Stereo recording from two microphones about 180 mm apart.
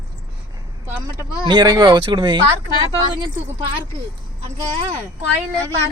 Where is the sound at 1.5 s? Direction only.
20° right (ahead or behind).